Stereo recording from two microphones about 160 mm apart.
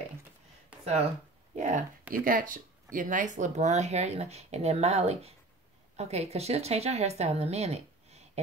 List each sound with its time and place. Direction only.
1.6 s speech: 55° right (ahead or behind)